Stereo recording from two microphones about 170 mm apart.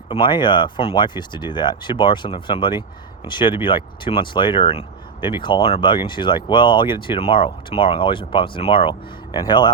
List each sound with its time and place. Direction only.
0.1 s speech: 25° left (ahead or behind)